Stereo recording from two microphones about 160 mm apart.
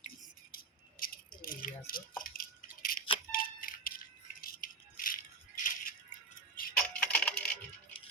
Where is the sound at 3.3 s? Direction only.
65° left (ahead or behind).